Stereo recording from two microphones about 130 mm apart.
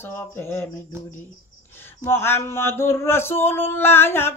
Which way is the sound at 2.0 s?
15° left (ahead or behind).